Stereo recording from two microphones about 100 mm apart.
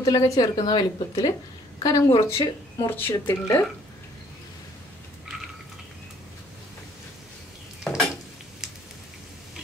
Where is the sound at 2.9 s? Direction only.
20° left (ahead or behind).